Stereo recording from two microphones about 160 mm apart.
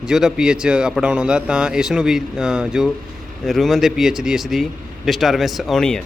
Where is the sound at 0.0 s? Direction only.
5° right (ahead or behind).